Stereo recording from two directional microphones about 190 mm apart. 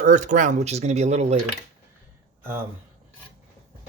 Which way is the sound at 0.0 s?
40° right (ahead or behind).